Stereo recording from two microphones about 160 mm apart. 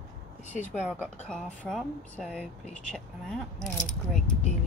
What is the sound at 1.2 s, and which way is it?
Speech, centre (ahead or behind).